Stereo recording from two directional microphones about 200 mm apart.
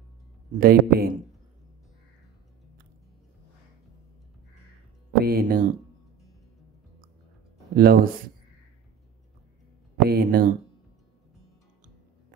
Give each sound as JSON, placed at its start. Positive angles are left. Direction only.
{"t": 0.6, "sound": "speech", "side_deg": -50}
{"t": 5.2, "sound": "speech", "side_deg": -50}
{"t": 7.7, "sound": "speech", "side_deg": -50}
{"t": 10.0, "sound": "speech", "side_deg": -50}